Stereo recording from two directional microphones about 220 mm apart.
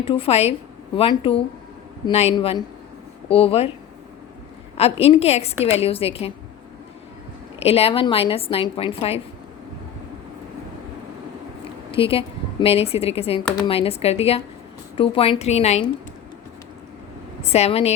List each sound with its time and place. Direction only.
0.0 s speech: 25° left (ahead or behind)
4.8 s speech: 25° left (ahead or behind)
7.6 s speech: 25° left (ahead or behind)
11.9 s speech: 25° left (ahead or behind)
17.4 s speech: 30° left (ahead or behind)